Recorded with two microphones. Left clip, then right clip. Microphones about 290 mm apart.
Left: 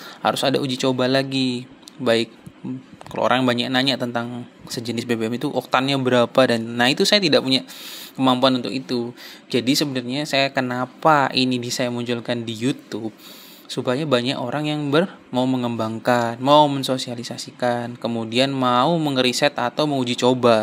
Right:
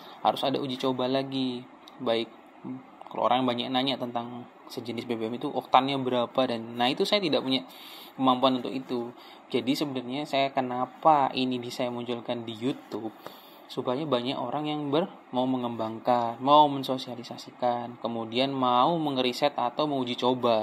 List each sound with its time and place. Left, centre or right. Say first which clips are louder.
0.2 s speech: left 6 dB; left
3.1 s speech: left 6 dB; left